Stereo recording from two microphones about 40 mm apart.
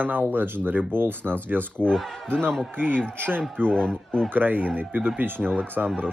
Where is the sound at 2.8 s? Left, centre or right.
Right.